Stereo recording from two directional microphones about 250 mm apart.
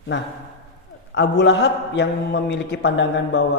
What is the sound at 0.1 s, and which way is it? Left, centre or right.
A man's voice, left.